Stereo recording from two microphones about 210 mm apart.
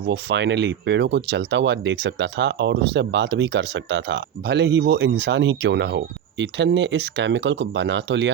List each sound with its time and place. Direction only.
0.1 s speech: 55° right (ahead or behind)